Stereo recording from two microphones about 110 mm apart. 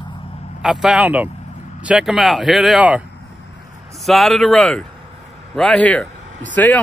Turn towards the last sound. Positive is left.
turn(degrees=15)  # may be behind; listen again after turning